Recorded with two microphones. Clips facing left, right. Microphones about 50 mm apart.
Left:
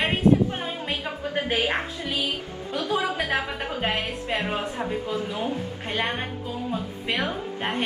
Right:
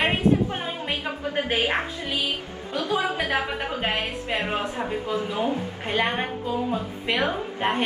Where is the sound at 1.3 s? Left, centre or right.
Right.